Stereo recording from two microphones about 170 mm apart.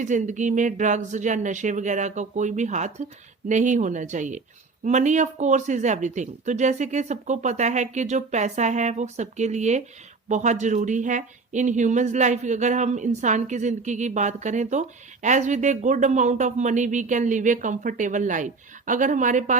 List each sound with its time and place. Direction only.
0.0 s speech: 45° right (ahead or behind)